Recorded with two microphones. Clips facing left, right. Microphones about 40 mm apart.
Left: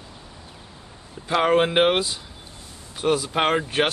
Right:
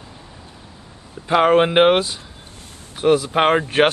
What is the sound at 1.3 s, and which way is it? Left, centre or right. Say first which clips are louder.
Speech: right 5 dB; centre.